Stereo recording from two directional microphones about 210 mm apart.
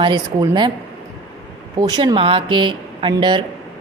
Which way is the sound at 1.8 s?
20° right (ahead or behind).